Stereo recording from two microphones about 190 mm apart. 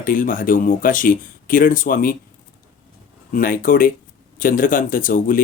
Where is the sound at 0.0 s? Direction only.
45° left (ahead or behind).